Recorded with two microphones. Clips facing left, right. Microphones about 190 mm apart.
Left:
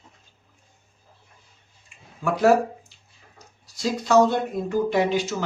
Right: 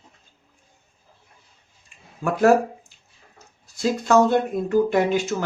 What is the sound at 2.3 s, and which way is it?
Speech, 50° right (ahead or behind).